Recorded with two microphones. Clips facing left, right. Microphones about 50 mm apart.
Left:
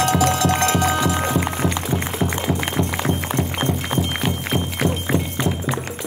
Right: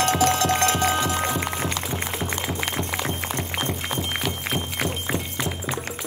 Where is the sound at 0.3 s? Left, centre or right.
Left.